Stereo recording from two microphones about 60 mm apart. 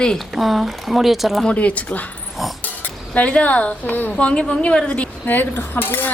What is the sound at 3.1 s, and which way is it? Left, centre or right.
A woman's voice, left.